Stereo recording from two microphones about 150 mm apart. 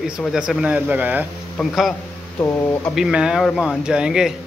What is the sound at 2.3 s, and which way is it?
Speech, 20° left (ahead or behind).